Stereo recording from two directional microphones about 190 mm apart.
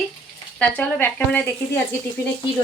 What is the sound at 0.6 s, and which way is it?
Speech, 10° left (ahead or behind).